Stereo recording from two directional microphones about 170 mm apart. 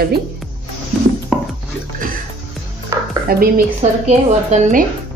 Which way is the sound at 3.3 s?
60° right (ahead or behind).